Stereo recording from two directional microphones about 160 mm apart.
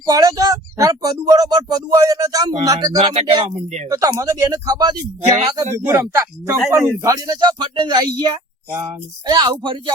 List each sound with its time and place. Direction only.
0.0 s speech: 20° right (ahead or behind)
2.9 s speech: 45° right (ahead or behind)
3.8 s speech: 20° right (ahead or behind)